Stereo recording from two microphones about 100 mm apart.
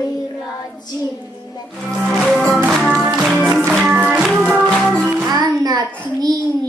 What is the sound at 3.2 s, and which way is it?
Music, centre (ahead or behind).